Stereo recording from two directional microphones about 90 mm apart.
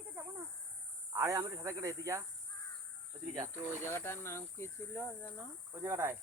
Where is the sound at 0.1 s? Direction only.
25° right (ahead or behind).